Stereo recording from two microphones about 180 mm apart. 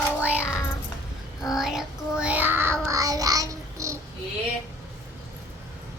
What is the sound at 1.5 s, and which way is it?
Child singing, centre (ahead or behind).